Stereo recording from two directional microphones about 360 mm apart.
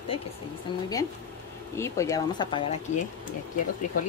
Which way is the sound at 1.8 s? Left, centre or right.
Centre.